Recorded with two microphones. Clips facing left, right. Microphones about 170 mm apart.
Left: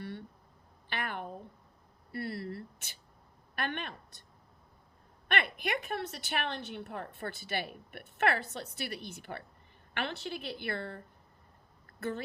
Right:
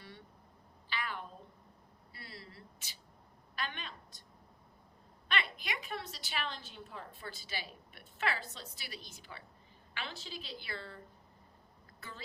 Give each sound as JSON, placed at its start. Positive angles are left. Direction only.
{"t": 0.0, "sound": "a sound", "side_deg": 60}
{"t": 3.5, "sound": "speech", "side_deg": 60}
{"t": 5.3, "sound": "a woman's voice", "side_deg": 60}